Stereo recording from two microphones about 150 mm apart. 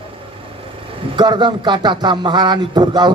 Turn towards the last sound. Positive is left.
turn(degrees=-30)  # may be behind; listen again after turning